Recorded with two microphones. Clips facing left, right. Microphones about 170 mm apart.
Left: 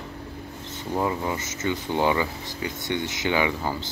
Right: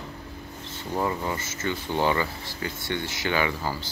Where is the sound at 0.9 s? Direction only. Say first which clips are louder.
Left 2 dB; 15° left (ahead or behind).